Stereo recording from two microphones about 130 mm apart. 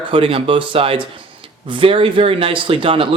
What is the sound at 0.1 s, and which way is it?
Speech, 45° right (ahead or behind).